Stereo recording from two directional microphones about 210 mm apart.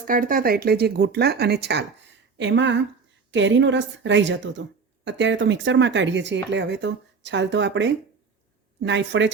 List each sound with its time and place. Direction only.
0.1 s speech: 40° right (ahead or behind); by 9.3 s 60° right (ahead or behind)